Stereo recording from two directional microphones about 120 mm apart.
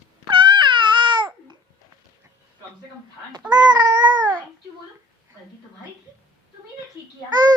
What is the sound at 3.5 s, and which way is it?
Babbling, 35° right (ahead or behind).